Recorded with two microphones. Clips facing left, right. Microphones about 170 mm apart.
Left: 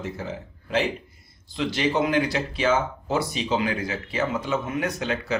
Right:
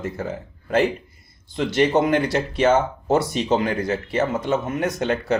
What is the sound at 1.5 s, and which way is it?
Speech, 55° right (ahead or behind).